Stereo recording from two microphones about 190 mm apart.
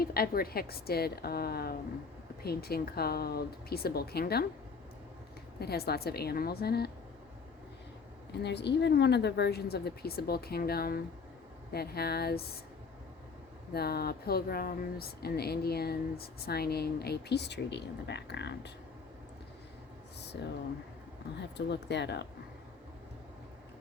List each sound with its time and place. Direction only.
0.0 s speech: 50° left (ahead or behind)
5.5 s speech: 55° left (ahead or behind)
8.4 s speech: 65° left (ahead or behind)
13.7 s speech: 55° left (ahead or behind)
21.7 s speech: 60° left (ahead or behind)